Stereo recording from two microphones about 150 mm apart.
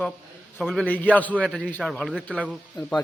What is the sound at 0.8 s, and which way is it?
Speech, 10° left (ahead or behind).